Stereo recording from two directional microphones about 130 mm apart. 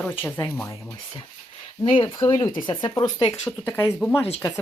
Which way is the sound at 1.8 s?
40° left (ahead or behind).